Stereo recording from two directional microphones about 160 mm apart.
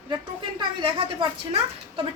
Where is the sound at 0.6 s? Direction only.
30° right (ahead or behind).